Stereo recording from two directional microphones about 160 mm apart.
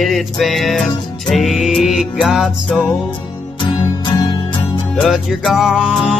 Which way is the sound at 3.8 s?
30° left (ahead or behind).